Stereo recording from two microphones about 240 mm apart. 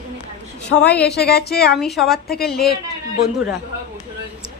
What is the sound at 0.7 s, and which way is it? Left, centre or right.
Speech, left.